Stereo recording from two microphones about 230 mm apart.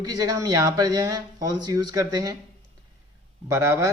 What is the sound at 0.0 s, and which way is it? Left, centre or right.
Speech, centre.